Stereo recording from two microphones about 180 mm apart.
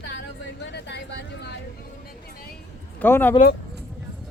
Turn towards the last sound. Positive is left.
turn(degrees=10)  # may be behind; listen again after turning